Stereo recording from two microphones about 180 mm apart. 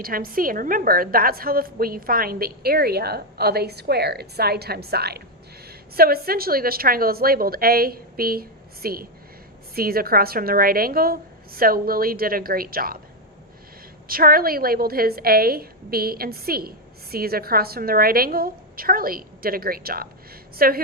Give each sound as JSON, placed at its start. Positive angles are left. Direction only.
{"t": 0.0, "sound": "a woman's voice", "side_deg": -55}
{"t": 14.1, "sound": "a woman's voice", "side_deg": -55}